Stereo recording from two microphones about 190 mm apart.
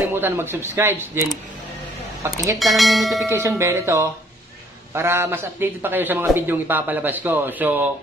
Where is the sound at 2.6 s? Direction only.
Centre (ahead or behind).